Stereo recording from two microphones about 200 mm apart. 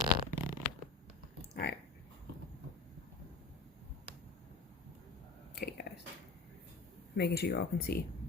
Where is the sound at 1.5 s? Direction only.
55° left (ahead or behind).